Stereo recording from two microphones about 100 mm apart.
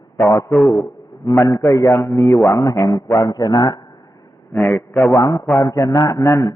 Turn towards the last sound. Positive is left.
turn(degrees=30)  # may be behind; listen again after turning